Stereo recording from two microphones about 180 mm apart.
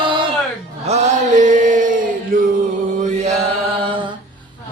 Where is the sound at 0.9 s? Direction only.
40° right (ahead or behind).